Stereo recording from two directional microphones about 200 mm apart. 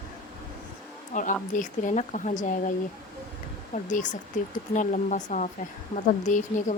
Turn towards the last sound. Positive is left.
turn(degrees=40)  # may be behind; listen again after turning